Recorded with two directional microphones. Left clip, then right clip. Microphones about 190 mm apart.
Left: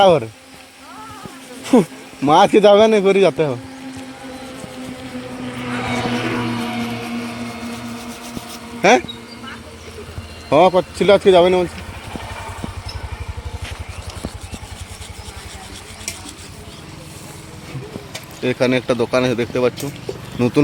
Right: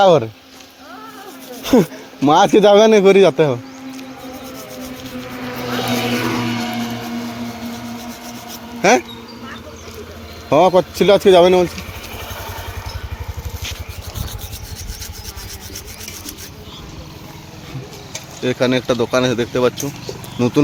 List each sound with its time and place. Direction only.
0.0 s speech: 15° right (ahead or behind)
1.6 s speech: 20° right (ahead or behind)
5.5 s vehicle: 60° right (ahead or behind)
6.3 s music: 35° right (ahead or behind)
6.6 s music: 15° right (ahead or behind)
8.3 s a sound: centre (ahead or behind)
10.5 s speech: 10° right (ahead or behind)
18.3 s speech: centre (ahead or behind)